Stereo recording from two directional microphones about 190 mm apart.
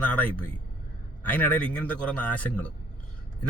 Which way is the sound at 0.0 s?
5° left (ahead or behind).